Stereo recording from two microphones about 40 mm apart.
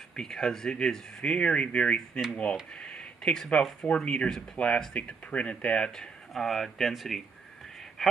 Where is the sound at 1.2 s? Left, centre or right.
Left.